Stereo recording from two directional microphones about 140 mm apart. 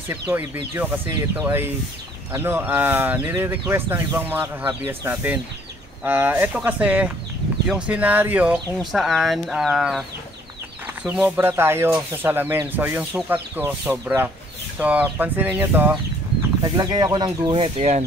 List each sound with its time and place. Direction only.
0.1 s speech: 15° right (ahead or behind)
11.1 s speech: 15° right (ahead or behind)
16.6 s speech: 30° right (ahead or behind)
17.7 s speech: 50° right (ahead or behind)